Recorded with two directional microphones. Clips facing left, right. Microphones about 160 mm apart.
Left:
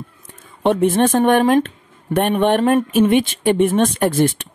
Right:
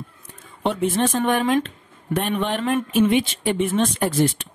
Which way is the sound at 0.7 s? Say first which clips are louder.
Left 6 dB; 55° left (ahead or behind).